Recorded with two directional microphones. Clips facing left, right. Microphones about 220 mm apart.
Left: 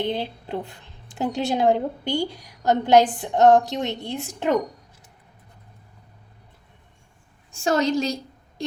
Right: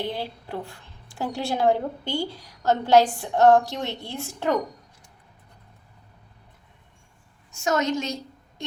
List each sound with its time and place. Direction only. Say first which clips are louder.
0.0 s a woman's voice: left 4 dB; 20° left (ahead or behind)
7.5 s a woman's voice: left 3 dB; 30° left (ahead or behind)